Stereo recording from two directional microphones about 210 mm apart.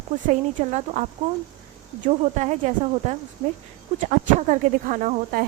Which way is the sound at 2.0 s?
35° right (ahead or behind).